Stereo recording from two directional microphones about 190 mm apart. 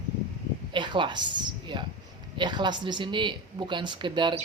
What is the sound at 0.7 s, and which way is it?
Speech, 25° right (ahead or behind).